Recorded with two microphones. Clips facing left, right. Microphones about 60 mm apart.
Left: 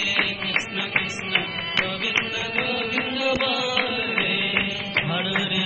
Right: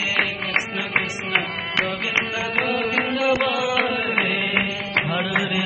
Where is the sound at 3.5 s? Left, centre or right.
Right.